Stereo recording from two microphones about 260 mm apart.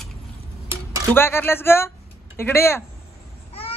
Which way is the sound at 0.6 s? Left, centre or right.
Centre.